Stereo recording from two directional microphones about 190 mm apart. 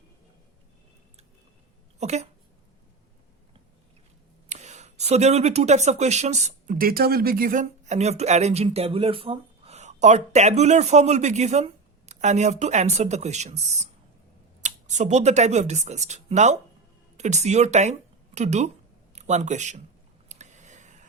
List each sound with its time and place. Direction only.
2.0 s speech: 35° right (ahead or behind)
4.4 s a man's voice: 35° right (ahead or behind)
20.2 s a sound: 40° right (ahead or behind)